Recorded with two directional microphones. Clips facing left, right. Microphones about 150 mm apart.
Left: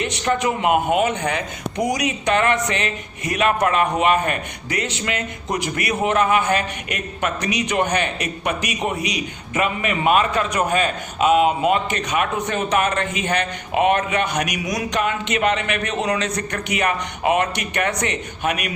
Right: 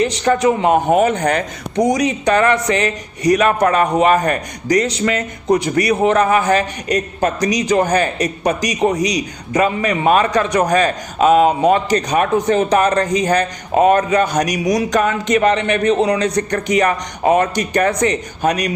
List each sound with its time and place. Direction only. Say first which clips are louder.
0.0 s a man's voice: right 6 dB; 35° right (ahead or behind)